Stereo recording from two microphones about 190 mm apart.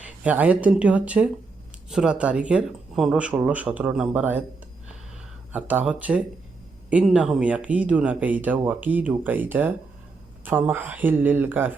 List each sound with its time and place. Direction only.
0.0 s speech: 10° right (ahead or behind)
5.5 s speech: 10° right (ahead or behind)